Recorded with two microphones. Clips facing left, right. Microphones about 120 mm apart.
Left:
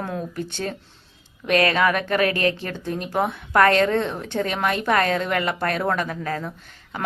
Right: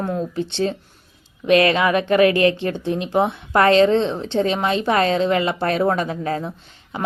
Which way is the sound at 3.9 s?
20° right (ahead or behind).